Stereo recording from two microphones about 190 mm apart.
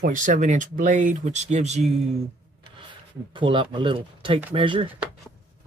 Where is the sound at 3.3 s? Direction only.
25° right (ahead or behind).